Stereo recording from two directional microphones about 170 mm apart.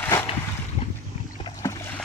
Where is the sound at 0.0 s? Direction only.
10° left (ahead or behind).